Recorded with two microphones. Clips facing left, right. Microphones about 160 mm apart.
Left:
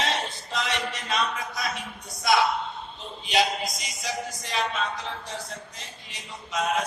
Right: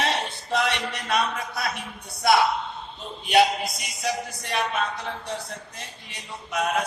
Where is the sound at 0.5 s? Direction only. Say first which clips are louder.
Right 5 dB; 60° right (ahead or behind).